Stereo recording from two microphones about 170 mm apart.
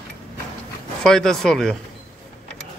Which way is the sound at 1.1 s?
5° left (ahead or behind).